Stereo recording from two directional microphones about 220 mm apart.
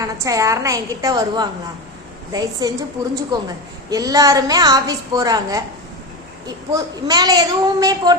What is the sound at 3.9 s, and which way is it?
A woman's voice, 15° right (ahead or behind).